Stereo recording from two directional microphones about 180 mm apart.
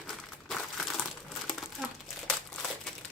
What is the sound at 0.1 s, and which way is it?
Crumpling, 5° left (ahead or behind).